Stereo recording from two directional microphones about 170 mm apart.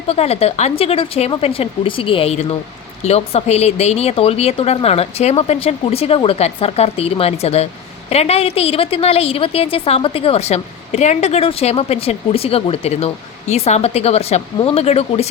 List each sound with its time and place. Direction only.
0.1 s a woman's voice: 35° left (ahead or behind)